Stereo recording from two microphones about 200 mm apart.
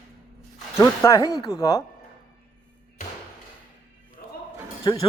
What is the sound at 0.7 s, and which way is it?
Speech, 15° left (ahead or behind).